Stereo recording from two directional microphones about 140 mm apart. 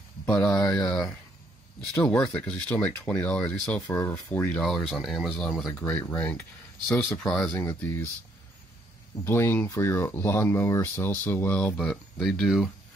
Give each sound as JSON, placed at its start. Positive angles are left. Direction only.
{"t": 0.2, "sound": "speech", "side_deg": 5}
{"t": 3.8, "sound": "speech", "side_deg": 20}
{"t": 5.7, "sound": "speech", "side_deg": 10}
{"t": 7.5, "sound": "speech", "side_deg": 15}
{"t": 9.2, "sound": "speech", "side_deg": 15}